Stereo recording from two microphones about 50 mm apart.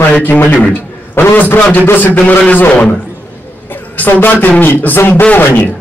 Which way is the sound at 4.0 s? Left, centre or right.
Left.